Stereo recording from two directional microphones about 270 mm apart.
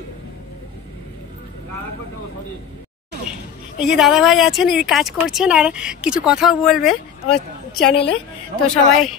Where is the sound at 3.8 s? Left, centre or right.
Centre.